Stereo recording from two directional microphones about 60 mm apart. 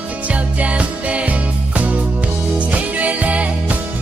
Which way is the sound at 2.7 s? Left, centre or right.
Right.